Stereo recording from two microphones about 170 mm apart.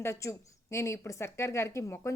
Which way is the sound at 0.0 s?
15° left (ahead or behind).